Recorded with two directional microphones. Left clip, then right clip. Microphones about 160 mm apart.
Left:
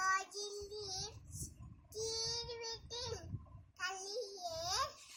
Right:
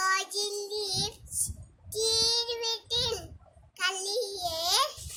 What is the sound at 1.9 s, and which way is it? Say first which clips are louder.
Child singing: right 14 dB; 15° right (ahead or behind).